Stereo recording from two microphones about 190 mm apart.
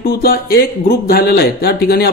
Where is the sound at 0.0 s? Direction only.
50° left (ahead or behind).